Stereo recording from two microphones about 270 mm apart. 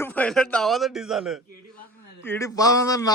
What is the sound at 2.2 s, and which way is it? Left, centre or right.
Speech, centre.